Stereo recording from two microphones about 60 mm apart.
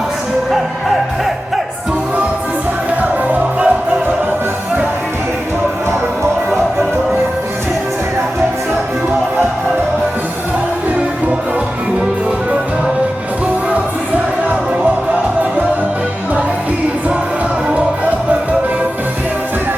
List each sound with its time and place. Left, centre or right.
3.0 s music: right